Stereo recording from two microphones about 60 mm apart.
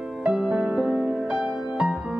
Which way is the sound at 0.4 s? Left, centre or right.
Centre.